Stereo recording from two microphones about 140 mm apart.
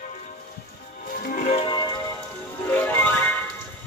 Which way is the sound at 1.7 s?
35° left (ahead or behind).